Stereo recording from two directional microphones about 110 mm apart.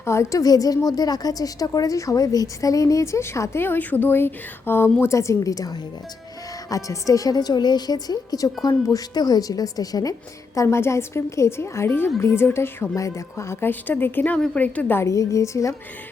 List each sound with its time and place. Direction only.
0.0 s a woman's voice: 25° left (ahead or behind)